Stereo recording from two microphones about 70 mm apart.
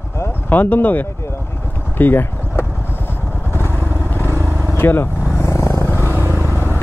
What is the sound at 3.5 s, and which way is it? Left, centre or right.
Vehicle, left.